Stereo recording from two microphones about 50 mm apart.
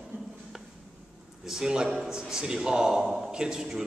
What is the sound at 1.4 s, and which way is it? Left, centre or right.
A man's voice, centre.